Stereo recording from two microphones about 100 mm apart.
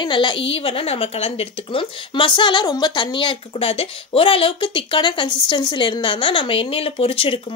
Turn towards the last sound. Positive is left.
turn(degrees=65)  # may be behind; listen again after turning